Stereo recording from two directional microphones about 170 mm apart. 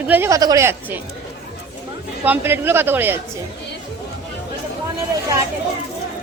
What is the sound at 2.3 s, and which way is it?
Speech, 10° right (ahead or behind).